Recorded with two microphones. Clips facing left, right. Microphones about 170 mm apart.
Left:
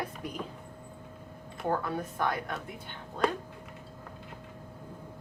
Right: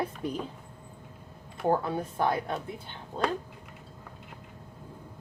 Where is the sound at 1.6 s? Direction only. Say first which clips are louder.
Right 4 dB; 30° right (ahead or behind).